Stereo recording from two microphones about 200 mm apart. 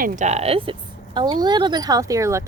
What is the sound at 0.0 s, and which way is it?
Speech, 40° right (ahead or behind).